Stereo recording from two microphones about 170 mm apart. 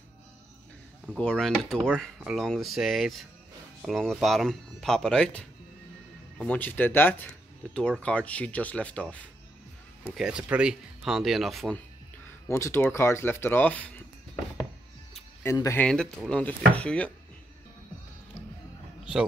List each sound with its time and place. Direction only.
1.0 s speech: 5° left (ahead or behind)
10.1 s speech: 5° right (ahead or behind)
12.4 s speech: 15° left (ahead or behind)
15.4 s speech: 15° left (ahead or behind)
15.8 s speech: 5° left (ahead or behind)